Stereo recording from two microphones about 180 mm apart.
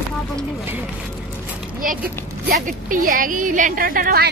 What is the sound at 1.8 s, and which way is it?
A woman's voice, 50° right (ahead or behind).